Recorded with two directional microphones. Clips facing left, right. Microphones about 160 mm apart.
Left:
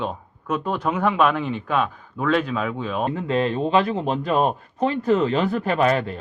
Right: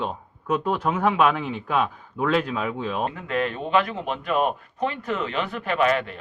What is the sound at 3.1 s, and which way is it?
Speech, 30° left (ahead or behind).